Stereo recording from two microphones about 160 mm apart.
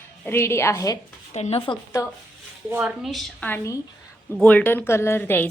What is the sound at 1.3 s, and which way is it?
Speech, 40° left (ahead or behind).